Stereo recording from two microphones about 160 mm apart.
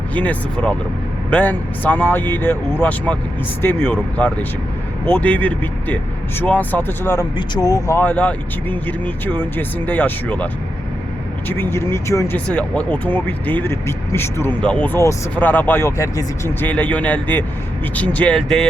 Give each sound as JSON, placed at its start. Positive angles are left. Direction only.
{"t": 0.1, "sound": "speech", "side_deg": 10}
{"t": 5.0, "sound": "speech", "side_deg": 10}